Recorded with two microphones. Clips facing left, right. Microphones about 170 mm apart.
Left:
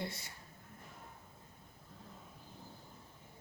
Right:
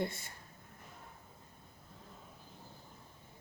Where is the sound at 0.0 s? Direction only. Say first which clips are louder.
Right 5 dB; 50° right (ahead or behind).